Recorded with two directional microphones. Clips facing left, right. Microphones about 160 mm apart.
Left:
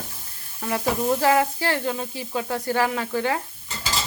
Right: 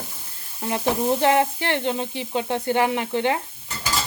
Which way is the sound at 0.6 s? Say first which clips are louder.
Right 1 dB; 25° right (ahead or behind).